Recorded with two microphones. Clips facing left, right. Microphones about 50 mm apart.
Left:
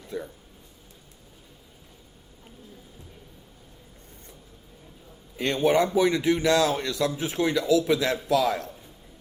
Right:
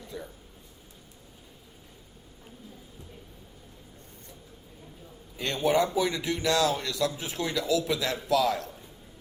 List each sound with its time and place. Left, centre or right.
0.1 s speech: left
5.4 s a man's voice: left